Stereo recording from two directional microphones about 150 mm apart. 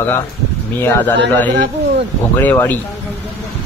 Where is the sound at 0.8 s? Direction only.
10° left (ahead or behind).